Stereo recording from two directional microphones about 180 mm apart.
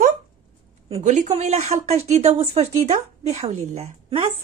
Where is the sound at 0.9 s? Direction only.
40° right (ahead or behind).